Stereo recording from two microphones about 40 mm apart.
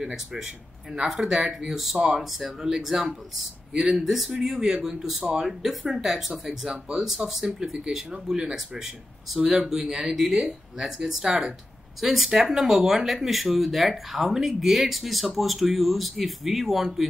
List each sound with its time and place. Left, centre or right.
0.0 s speech: centre
5.0 s speech: centre
6.6 s speech: centre
12.0 s speech: centre